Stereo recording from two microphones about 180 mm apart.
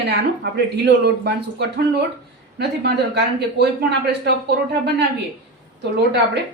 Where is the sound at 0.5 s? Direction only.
65° right (ahead or behind).